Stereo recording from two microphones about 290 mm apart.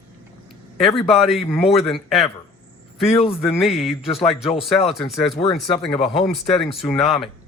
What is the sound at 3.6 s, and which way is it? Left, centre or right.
Speech, centre.